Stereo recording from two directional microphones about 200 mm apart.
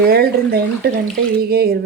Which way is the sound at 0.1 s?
50° right (ahead or behind).